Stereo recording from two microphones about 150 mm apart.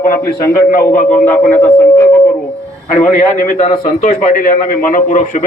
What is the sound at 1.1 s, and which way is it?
Speech, 10° left (ahead or behind).